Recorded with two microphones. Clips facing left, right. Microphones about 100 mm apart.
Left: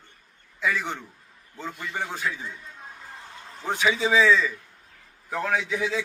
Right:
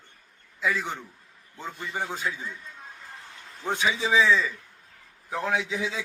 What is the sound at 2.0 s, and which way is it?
Speech, 20° right (ahead or behind).